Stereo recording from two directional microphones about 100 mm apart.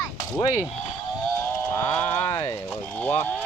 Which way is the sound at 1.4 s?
20° left (ahead or behind).